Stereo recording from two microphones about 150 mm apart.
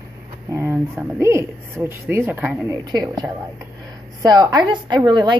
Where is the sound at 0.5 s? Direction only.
15° right (ahead or behind).